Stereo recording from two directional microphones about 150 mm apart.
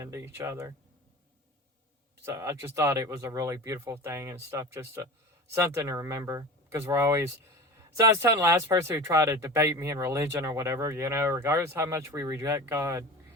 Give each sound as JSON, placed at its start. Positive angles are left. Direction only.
{"t": 0.0, "sound": "speech", "side_deg": -20}
{"t": 2.2, "sound": "speech", "side_deg": -20}